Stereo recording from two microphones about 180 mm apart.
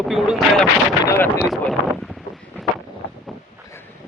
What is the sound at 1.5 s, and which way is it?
Speech, centre (ahead or behind).